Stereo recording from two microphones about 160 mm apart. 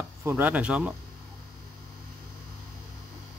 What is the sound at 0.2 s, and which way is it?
Speech, 15° right (ahead or behind).